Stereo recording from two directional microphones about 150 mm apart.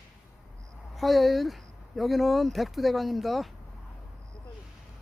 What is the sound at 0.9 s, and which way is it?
Speech, centre (ahead or behind).